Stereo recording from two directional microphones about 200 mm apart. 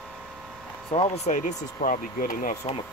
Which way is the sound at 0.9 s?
30° left (ahead or behind).